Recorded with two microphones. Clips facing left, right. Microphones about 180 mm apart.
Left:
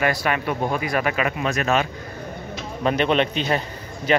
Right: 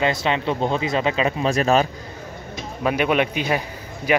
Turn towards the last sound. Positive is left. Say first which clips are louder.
# even
turn(degrees=-10)  # may be behind; listen again after turning